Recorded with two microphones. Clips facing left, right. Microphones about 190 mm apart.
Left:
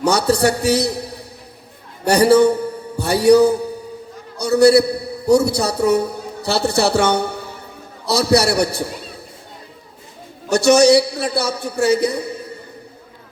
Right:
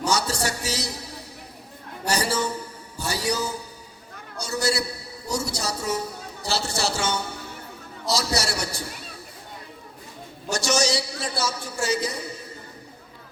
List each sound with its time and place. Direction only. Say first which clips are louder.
0.0 s a man's voice: left 10 dB; 60° left (ahead or behind)
10.5 s a man's voice: left 13 dB; 60° left (ahead or behind)